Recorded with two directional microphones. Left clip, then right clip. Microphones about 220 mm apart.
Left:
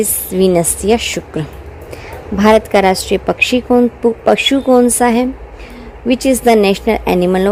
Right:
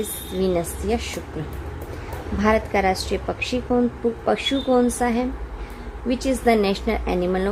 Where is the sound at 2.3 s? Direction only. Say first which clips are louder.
Left 10 dB; 40° left (ahead or behind).